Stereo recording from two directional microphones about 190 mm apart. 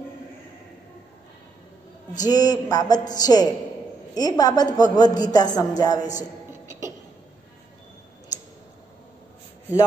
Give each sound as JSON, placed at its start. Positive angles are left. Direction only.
{"t": 2.2, "sound": "a woman's voice", "side_deg": 20}